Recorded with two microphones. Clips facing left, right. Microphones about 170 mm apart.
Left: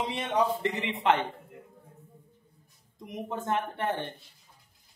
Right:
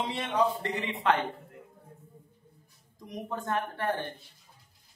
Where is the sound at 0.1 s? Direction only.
20° left (ahead or behind).